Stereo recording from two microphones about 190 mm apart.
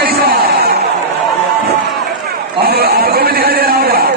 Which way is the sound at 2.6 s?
55° right (ahead or behind).